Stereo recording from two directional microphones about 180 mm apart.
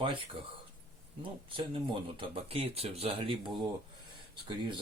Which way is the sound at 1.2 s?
30° right (ahead or behind).